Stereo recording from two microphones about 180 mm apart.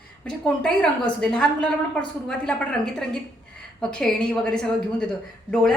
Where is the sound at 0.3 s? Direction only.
5° left (ahead or behind).